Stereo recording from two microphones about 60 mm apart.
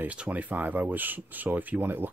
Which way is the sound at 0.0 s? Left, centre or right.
Right.